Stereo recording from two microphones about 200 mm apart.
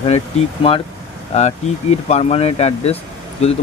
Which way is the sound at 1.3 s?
35° left (ahead or behind).